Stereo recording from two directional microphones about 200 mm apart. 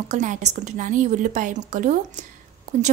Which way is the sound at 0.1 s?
35° right (ahead or behind).